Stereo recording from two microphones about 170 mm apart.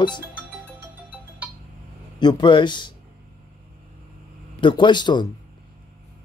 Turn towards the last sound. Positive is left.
turn(degrees=25)  # may be behind; listen again after turning